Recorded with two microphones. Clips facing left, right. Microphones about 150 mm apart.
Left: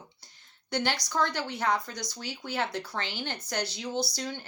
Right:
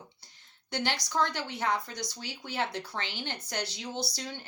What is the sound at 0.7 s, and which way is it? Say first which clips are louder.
Speech: left 2 dB; 20° right (ahead or behind).